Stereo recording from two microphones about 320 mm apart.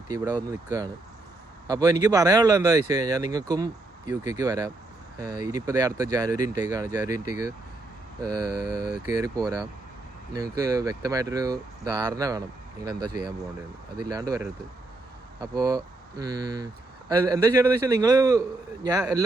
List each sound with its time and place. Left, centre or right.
1.7 s a man's voice: centre
8.4 s mantra: right
9.1 s a man's voice: centre